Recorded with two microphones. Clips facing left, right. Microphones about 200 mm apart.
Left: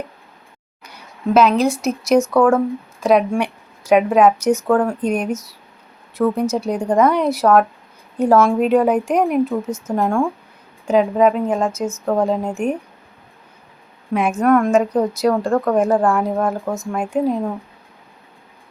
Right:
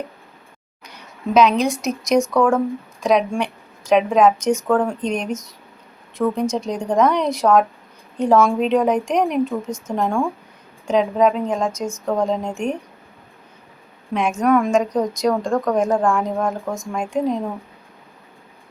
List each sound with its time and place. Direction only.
0.9 s a sound: 5° left (ahead or behind)
1.8 s speech: 5° left (ahead or behind)
14.1 s speech: 5° left (ahead or behind)